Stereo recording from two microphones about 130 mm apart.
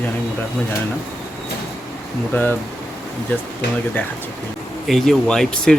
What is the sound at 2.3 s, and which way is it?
Speech, 15° left (ahead or behind).